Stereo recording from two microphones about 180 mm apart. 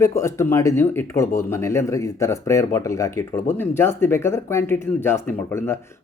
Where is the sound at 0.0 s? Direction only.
15° left (ahead or behind).